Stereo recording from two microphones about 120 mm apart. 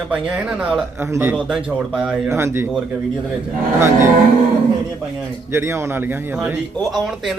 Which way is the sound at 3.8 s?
20° right (ahead or behind).